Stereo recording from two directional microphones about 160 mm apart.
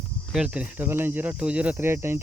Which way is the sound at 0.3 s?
5° right (ahead or behind).